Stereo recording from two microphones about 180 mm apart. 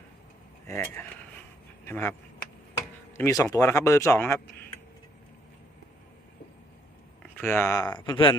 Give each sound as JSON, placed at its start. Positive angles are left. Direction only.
{"t": 0.7, "sound": "speech", "side_deg": 10}
{"t": 7.2, "sound": "speech", "side_deg": 10}